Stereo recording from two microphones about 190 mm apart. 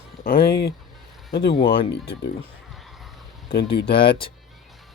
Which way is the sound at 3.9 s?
25° left (ahead or behind).